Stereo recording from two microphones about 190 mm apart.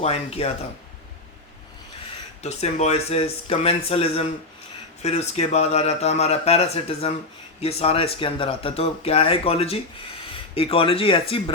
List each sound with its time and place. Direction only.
0.0 s speech: 30° left (ahead or behind)
2.4 s speech: 35° left (ahead or behind)